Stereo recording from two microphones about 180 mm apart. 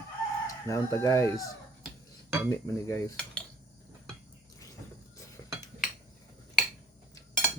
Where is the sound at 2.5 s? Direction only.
15° left (ahead or behind).